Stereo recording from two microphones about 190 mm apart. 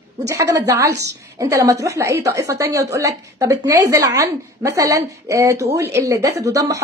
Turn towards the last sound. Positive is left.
turn(degrees=-15)  # may be behind; listen again after turning